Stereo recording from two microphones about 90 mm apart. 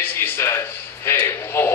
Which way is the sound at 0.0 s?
25° left (ahead or behind).